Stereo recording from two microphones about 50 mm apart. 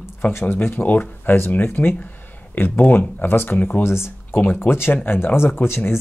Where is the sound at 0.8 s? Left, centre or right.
Left.